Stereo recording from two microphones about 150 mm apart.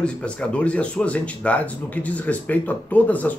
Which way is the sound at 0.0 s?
5° left (ahead or behind).